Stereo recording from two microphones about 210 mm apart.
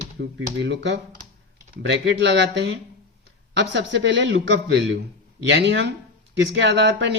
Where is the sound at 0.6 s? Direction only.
55° right (ahead or behind).